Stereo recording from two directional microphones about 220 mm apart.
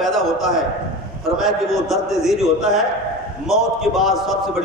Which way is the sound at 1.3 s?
Centre (ahead or behind).